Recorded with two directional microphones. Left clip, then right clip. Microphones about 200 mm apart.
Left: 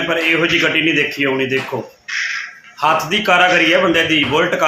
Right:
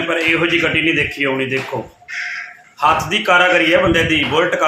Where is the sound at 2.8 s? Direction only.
Centre (ahead or behind).